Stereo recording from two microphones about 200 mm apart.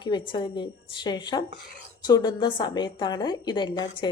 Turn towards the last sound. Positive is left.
turn(degrees=20)  # may be behind; listen again after turning